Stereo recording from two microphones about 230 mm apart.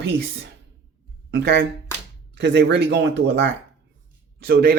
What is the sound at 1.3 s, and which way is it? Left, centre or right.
Speech, right.